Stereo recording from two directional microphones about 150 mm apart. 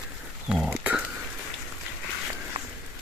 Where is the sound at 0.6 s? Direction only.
10° right (ahead or behind).